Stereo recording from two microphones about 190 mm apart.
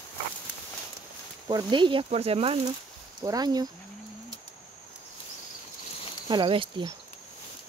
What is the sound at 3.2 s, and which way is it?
Speech, 20° right (ahead or behind).